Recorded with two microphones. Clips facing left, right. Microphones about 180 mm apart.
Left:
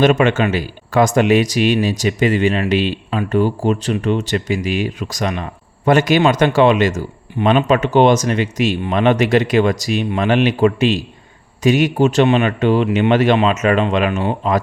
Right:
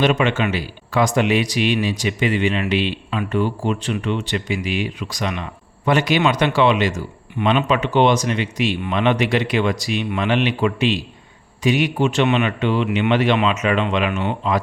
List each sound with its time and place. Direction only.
0.0 s speech: 45° left (ahead or behind)